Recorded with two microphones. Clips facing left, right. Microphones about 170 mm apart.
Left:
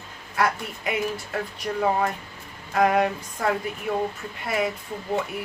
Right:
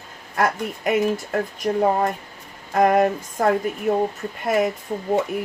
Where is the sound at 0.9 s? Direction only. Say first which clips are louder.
Right 7 dB; 45° right (ahead or behind).